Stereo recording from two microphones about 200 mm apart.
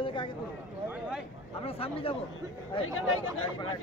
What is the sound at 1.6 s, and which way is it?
Speech, 30° left (ahead or behind).